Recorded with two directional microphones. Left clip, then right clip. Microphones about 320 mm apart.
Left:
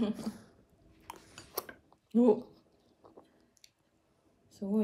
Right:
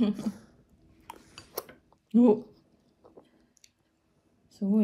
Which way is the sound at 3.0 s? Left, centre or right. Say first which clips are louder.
Right 2 dB; centre.